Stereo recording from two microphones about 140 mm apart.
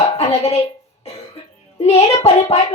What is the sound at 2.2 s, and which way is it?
Speech, 50° left (ahead or behind).